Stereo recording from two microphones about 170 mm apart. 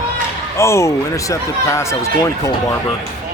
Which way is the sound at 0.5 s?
15° left (ahead or behind).